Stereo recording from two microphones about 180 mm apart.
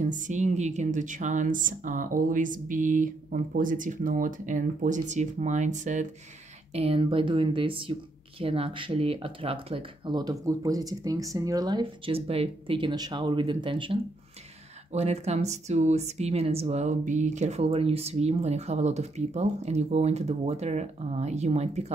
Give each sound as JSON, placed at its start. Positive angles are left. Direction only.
{"t": 0.0, "sound": "speech", "side_deg": -40}